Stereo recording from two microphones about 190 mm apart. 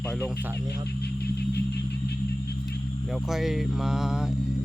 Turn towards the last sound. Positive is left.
turn(degrees=0)  # may be behind; listen again after turning